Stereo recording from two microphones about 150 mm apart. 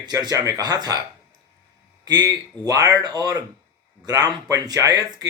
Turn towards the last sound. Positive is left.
turn(degrees=-25)  # may be behind; listen again after turning